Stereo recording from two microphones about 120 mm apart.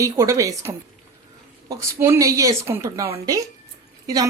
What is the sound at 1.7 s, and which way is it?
A woman's voice, 25° right (ahead or behind).